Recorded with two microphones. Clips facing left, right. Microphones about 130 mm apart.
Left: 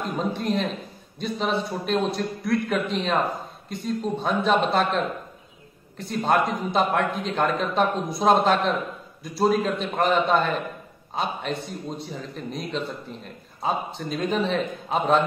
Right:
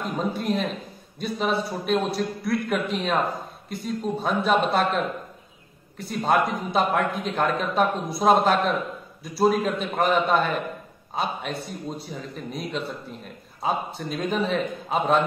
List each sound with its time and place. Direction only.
0.0 s a man's voice: centre (ahead or behind)